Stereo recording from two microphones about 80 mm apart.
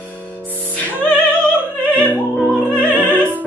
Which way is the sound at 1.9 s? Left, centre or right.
Right.